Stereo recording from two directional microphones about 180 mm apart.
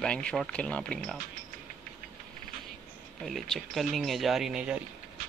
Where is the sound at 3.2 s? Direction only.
Centre (ahead or behind).